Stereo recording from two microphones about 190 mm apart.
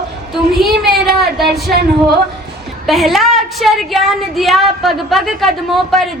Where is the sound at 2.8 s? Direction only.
Centre (ahead or behind).